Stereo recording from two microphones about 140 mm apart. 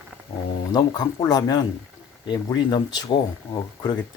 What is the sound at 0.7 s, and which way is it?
Speech, 30° left (ahead or behind).